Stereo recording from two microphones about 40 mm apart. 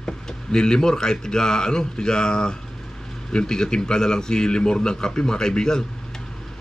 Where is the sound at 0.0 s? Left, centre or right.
Left.